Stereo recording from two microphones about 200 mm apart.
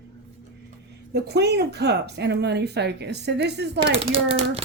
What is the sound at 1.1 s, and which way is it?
Speech, 55° right (ahead or behind).